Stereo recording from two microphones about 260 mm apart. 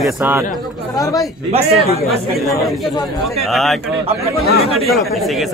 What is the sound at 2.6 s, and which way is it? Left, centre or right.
Speech, centre.